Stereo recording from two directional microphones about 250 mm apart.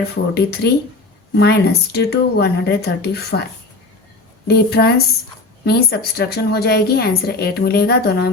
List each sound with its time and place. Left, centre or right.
0.3 s a woman's voice: left
4.4 s a woman's voice: left